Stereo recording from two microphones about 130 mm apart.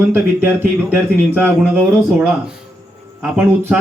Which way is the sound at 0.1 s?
15° right (ahead or behind).